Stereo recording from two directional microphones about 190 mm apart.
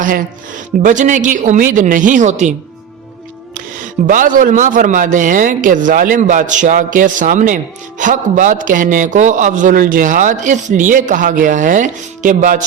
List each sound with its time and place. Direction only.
0.0 s speech: 45° right (ahead or behind)
4.0 s speech: 45° right (ahead or behind)